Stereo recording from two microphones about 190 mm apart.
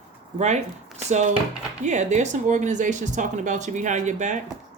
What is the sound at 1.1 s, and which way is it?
Speech, 40° right (ahead or behind).